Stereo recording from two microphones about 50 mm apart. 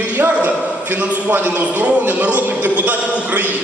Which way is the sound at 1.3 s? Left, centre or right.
Right.